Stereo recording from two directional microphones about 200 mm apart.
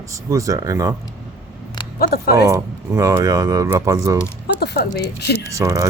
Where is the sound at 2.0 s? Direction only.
50° left (ahead or behind).